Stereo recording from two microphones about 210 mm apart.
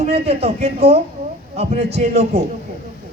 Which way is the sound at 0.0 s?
30° right (ahead or behind).